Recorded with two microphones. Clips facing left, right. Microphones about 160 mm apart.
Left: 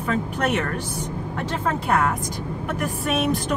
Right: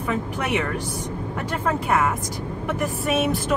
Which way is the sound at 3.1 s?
5° right (ahead or behind).